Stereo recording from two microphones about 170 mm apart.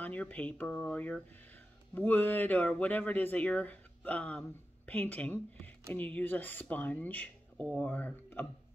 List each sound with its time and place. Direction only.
0.0 s speech: 10° left (ahead or behind)